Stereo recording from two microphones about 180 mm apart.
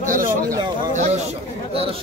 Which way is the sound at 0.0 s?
50° right (ahead or behind).